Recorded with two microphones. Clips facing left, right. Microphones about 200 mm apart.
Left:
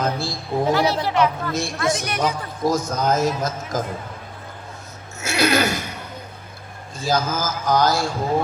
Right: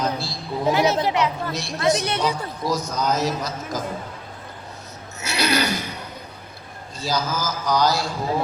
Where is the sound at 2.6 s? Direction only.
50° left (ahead or behind).